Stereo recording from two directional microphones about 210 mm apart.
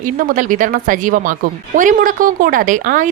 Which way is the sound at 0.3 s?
40° right (ahead or behind).